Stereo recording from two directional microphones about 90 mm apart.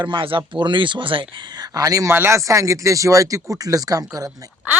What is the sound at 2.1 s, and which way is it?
Speech, 30° right (ahead or behind).